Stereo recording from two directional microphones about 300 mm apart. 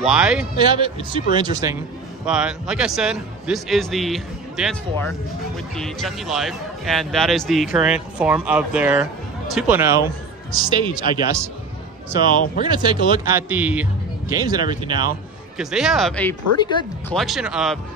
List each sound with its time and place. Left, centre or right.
0.0 s a man's voice: centre
0.6 s a man's voice: centre
5.8 s a man's voice: centre
12.6 s speech: centre
15.5 s a man's voice: centre
17.1 s a man's voice: centre